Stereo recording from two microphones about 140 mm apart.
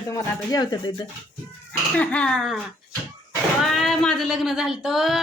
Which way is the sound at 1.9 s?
10° left (ahead or behind).